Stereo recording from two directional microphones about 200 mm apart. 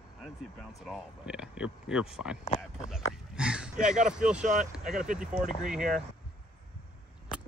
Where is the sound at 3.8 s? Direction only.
5° right (ahead or behind).